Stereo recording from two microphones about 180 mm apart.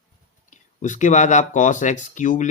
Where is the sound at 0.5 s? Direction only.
45° left (ahead or behind).